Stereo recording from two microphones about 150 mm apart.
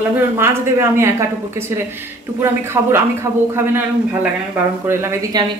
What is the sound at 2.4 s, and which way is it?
Speech, 15° right (ahead or behind).